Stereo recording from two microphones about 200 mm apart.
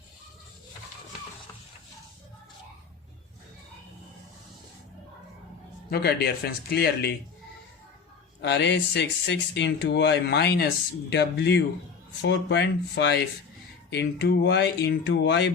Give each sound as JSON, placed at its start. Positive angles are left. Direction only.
{"t": 5.9, "sound": "speech", "side_deg": 50}
{"t": 8.4, "sound": "speech", "side_deg": 60}